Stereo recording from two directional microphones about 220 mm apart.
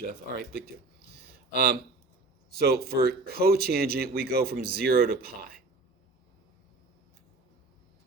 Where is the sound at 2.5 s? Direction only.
45° right (ahead or behind).